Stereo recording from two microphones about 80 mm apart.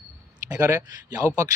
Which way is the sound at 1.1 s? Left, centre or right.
Right.